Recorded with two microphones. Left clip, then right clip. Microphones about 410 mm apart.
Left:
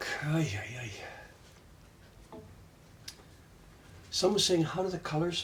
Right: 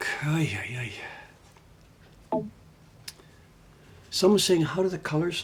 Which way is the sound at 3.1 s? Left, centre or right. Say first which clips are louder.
Right 4 dB; right.